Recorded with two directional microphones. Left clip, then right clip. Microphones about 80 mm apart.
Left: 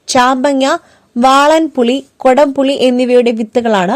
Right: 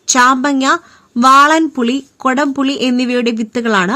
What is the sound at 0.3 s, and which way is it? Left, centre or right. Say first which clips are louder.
Speech: left 1 dB; left.